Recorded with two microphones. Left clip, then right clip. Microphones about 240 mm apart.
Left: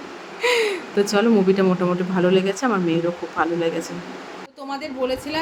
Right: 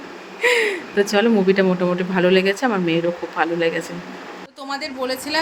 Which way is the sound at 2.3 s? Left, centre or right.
Left.